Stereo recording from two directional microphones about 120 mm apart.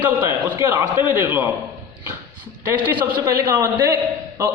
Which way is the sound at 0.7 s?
20° right (ahead or behind).